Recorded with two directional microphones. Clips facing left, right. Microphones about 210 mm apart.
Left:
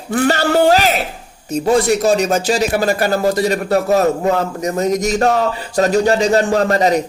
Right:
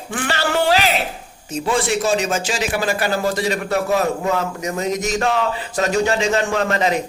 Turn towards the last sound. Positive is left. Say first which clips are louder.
# left 5 dB
turn(degrees=40)  # may be behind; listen again after turning